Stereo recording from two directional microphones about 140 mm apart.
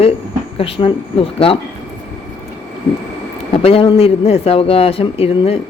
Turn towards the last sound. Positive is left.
turn(degrees=45)  # may be behind; listen again after turning